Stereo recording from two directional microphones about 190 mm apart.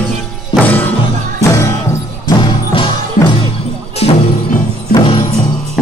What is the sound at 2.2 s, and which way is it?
Music, 25° left (ahead or behind).